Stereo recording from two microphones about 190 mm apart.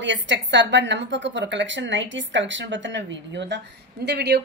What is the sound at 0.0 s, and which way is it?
A woman's voice, 70° right (ahead or behind).